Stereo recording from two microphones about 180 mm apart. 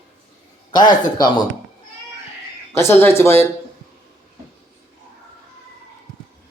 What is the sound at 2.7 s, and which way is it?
Speech, 15° left (ahead or behind).